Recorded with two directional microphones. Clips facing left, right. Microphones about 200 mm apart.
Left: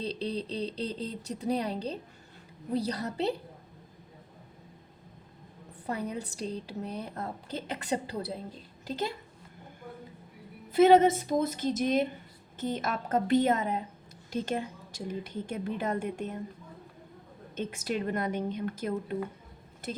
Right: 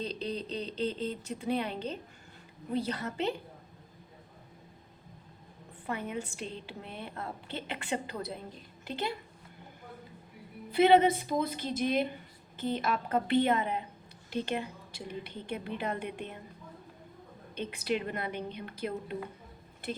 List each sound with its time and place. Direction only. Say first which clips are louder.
0.0 s a woman's voice: left 2 dB; 35° left (ahead or behind)
5.8 s a woman's voice: left 2 dB; 40° left (ahead or behind)
10.7 s a woman's voice: left 3 dB; 40° left (ahead or behind)
17.5 s a woman's voice: even; 45° left (ahead or behind)